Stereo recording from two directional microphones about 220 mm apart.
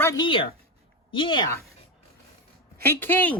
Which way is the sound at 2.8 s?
10° left (ahead or behind).